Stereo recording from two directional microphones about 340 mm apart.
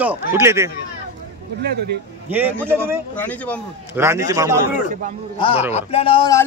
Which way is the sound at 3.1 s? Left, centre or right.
Centre.